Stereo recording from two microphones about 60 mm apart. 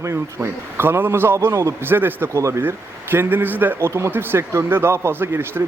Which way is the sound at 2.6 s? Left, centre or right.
Right.